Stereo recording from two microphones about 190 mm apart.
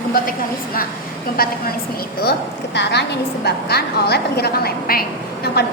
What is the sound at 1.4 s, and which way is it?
Speech, 50° left (ahead or behind).